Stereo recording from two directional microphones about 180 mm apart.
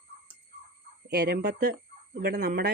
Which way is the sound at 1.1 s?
60° right (ahead or behind).